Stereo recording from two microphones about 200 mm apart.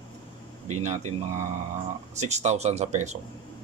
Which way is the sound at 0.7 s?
35° right (ahead or behind).